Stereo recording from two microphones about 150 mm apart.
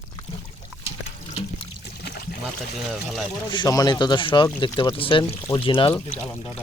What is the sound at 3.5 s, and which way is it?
Speech, 30° left (ahead or behind).